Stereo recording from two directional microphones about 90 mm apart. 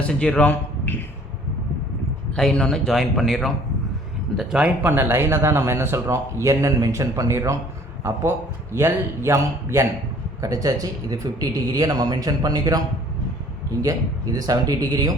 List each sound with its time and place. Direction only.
0.0 s a man's voice: 15° left (ahead or behind)
2.3 s a man's voice: 10° left (ahead or behind)
4.4 s speech: 10° right (ahead or behind)
4.9 s speech: 25° right (ahead or behind)
8.7 s a man's voice: 30° right (ahead or behind)
13.8 s speech: 40° right (ahead or behind)